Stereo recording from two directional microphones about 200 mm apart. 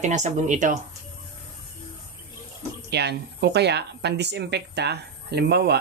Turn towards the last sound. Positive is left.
turn(degrees=-55)  # may be behind; listen again after turning